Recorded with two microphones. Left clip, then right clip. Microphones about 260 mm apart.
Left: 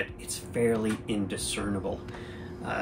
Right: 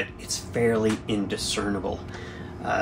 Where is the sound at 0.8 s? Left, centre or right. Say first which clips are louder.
Right 6 dB; centre.